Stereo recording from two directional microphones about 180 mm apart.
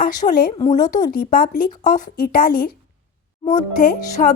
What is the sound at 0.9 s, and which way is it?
A woman's voice, 50° left (ahead or behind).